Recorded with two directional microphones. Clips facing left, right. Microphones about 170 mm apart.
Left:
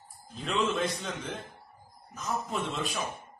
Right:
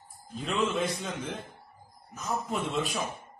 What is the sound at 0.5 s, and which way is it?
Speech, centre (ahead or behind).